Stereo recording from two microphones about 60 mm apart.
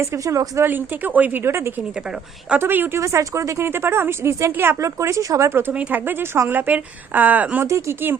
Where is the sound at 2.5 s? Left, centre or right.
Right.